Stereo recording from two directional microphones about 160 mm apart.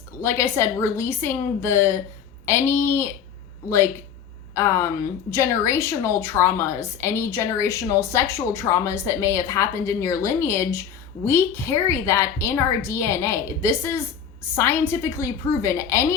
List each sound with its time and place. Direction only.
0.2 s a woman's voice: 15° left (ahead or behind)
4.5 s a woman's voice: 20° left (ahead or behind)